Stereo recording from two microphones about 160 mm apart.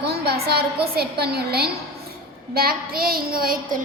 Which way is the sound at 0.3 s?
80° right.